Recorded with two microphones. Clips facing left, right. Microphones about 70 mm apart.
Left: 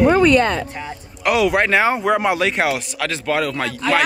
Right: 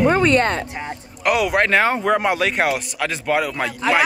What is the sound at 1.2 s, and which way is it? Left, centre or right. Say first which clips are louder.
A man's voice: left 1 dB; centre.